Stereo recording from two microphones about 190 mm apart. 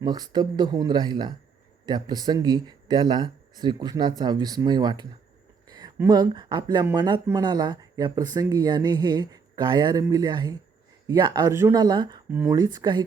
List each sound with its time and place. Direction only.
0.0 s speech: 20° right (ahead or behind)